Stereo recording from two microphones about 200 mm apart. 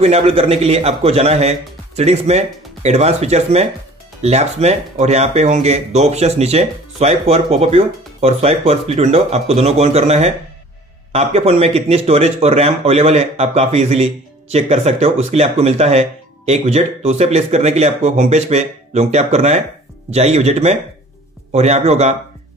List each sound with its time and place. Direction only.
0.0 s speech: 30° right (ahead or behind)